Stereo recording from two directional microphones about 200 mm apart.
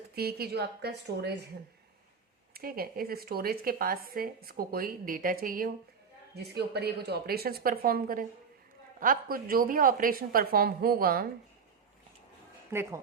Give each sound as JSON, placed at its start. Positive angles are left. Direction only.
{"t": 0.2, "sound": "speech", "side_deg": -50}
{"t": 2.5, "sound": "speech", "side_deg": -50}
{"t": 6.3, "sound": "speech", "side_deg": -55}
{"t": 12.7, "sound": "speech", "side_deg": -15}